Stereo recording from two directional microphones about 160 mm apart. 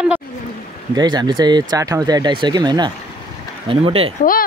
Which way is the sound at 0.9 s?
25° right (ahead or behind).